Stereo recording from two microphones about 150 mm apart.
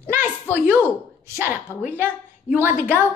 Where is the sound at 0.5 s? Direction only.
15° right (ahead or behind).